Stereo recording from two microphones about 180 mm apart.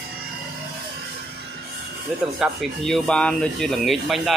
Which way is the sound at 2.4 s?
Centre (ahead or behind).